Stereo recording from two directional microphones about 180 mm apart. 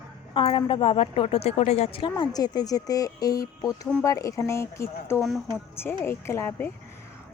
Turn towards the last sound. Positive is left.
turn(degrees=15)  # may be behind; listen again after turning